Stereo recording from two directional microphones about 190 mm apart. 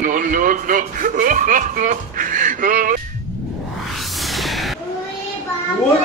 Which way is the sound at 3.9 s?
Centre (ahead or behind).